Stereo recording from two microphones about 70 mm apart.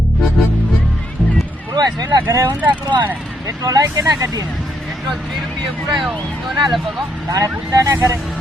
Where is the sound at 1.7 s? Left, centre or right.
Right.